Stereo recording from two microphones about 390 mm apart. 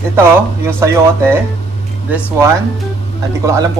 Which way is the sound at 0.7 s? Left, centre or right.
Centre.